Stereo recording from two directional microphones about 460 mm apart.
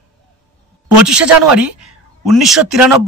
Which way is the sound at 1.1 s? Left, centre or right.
Centre.